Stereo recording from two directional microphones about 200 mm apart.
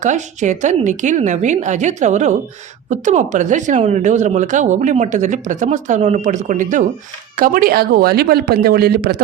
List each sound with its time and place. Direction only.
0.0 s speech: 35° right (ahead or behind)